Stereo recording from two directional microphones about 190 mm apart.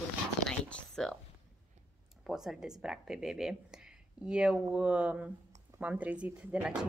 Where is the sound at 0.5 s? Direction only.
5° left (ahead or behind).